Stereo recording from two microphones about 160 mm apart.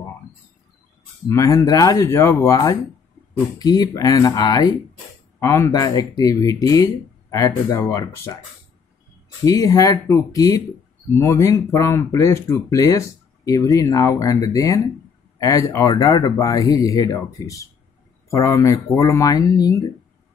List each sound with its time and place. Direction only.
1.3 s speech: 20° left (ahead or behind)
9.4 s speech: 20° left (ahead or behind)